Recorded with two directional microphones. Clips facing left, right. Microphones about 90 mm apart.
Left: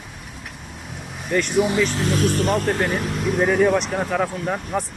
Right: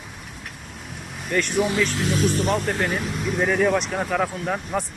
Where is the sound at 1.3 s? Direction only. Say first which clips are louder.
Left 3 dB; centre (ahead or behind).